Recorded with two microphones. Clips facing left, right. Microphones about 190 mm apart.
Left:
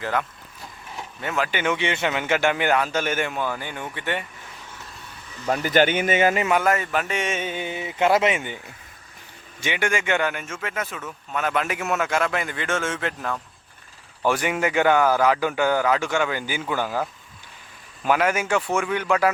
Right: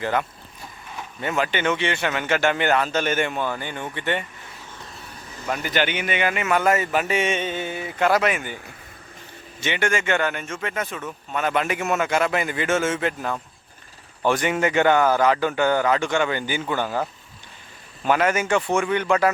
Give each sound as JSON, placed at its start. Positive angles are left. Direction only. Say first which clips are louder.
{"t": 0.0, "sound": "speech", "louder": "right 2 dB", "side_deg": 0}
{"t": 5.5, "sound": "speech", "louder": "left 4 dB", "side_deg": 40}
{"t": 6.5, "sound": "speech", "louder": "right 1 dB", "side_deg": 0}
{"t": 9.6, "sound": "speech", "louder": "right 1 dB", "side_deg": 10}
{"t": 14.2, "sound": "speech", "louder": "right 1 dB", "side_deg": 5}